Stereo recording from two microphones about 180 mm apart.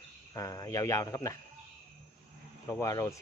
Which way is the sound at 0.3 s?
20° left (ahead or behind).